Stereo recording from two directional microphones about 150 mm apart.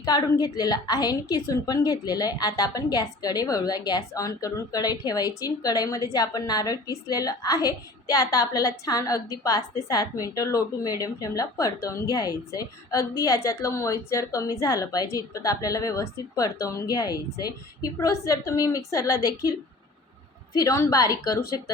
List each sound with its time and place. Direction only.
0.0 s a woman's voice: 25° left (ahead or behind)
20.6 s a woman's voice: 20° left (ahead or behind)